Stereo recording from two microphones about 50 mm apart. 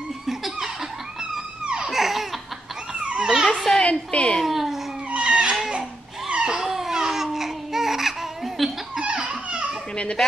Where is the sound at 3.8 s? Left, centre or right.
Left.